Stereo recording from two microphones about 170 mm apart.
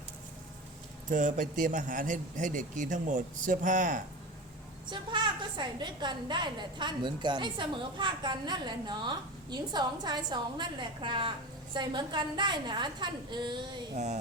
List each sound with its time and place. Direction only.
1.1 s a man's voice: 50° right (ahead or behind)
4.9 s a woman's voice: 25° right (ahead or behind)
13.9 s a man's voice: 40° right (ahead or behind)